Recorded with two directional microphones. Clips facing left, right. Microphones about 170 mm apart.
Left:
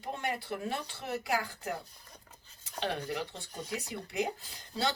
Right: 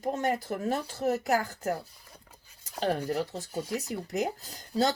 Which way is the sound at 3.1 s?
40° right (ahead or behind).